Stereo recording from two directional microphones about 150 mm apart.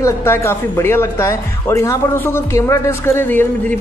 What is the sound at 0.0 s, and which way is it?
Speech, 15° left (ahead or behind).